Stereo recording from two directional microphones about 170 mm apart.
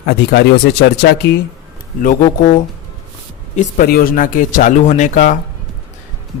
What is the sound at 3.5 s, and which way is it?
Speech, 55° left (ahead or behind).